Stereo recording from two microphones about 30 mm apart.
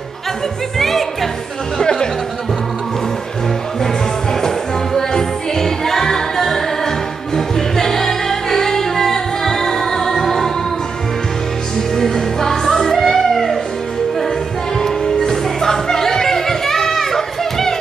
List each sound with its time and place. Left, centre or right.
0.7 s music: centre
1.8 s music: left
4.9 s music: centre
12.0 s music: centre
14.8 s music: centre